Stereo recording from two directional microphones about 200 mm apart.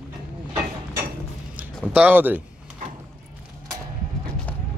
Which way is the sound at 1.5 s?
5° right (ahead or behind).